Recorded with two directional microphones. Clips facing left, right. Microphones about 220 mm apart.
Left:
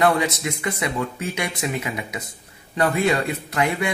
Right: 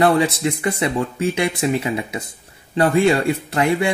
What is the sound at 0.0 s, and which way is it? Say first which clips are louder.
Speech: right 4 dB; 30° right (ahead or behind).